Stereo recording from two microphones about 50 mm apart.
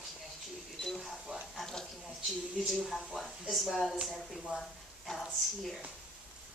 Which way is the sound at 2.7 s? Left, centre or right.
Centre.